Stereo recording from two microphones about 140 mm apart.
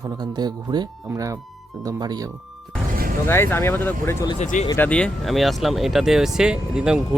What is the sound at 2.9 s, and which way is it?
Music, 90° right.